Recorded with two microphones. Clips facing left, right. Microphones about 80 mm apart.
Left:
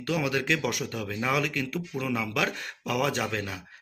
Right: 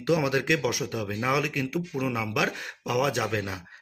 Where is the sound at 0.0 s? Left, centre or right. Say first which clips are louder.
Right 3 dB; centre.